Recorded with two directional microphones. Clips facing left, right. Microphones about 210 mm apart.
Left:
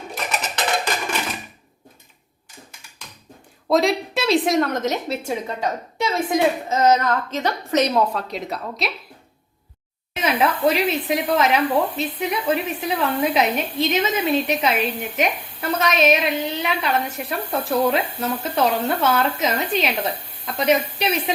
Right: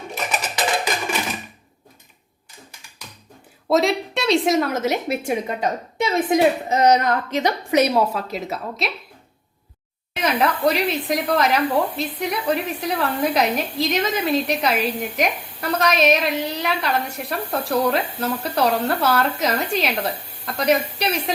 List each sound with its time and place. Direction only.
3.7 s a woman's voice: centre (ahead or behind)
10.2 s speech: 5° left (ahead or behind)